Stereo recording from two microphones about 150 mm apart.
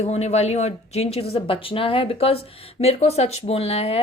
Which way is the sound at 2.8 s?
45° left (ahead or behind).